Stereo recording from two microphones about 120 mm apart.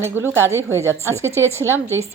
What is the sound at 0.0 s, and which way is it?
A woman's voice, 20° right (ahead or behind).